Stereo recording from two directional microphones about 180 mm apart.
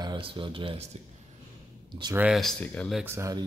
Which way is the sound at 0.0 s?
25° right (ahead or behind).